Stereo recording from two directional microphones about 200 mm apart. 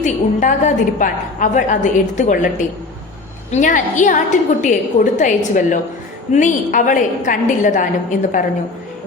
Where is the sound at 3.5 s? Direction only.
40° left (ahead or behind).